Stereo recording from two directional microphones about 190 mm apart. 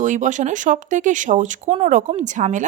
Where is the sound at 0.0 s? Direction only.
40° right (ahead or behind).